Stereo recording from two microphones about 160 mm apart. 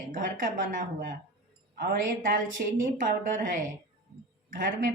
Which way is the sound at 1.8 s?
65° right (ahead or behind).